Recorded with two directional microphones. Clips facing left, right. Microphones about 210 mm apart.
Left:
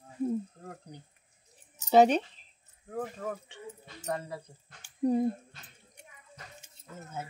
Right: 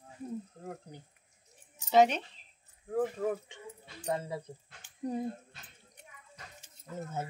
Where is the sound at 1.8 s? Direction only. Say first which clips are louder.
Left 3 dB; 35° left (ahead or behind).